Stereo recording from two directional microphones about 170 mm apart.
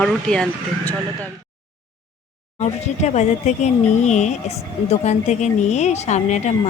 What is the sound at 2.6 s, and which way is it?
Speech, 40° left (ahead or behind).